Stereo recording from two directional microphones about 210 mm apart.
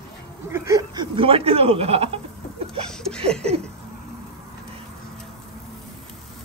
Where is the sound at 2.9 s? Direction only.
5° left (ahead or behind).